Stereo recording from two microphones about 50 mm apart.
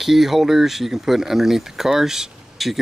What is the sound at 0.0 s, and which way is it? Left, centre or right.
Speech, centre.